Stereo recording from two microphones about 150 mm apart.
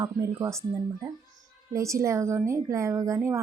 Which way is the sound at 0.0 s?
25° right (ahead or behind).